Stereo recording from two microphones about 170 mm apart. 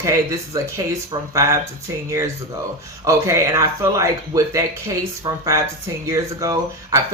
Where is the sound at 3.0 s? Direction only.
20° right (ahead or behind).